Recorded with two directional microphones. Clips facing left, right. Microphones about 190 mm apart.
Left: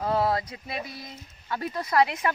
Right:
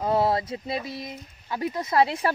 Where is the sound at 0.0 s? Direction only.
25° right (ahead or behind).